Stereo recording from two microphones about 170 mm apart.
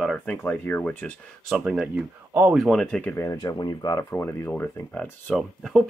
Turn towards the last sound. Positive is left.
turn(degrees=0)  # may be behind; listen again after turning